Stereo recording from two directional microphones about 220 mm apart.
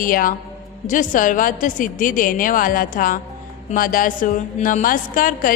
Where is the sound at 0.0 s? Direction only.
40° left (ahead or behind).